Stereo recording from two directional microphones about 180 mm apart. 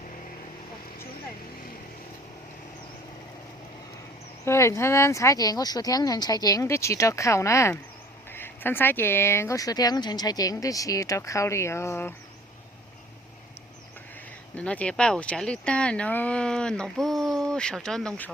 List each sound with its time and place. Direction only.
4.4 s speech: 15° left (ahead or behind)
14.5 s speech: 5° left (ahead or behind)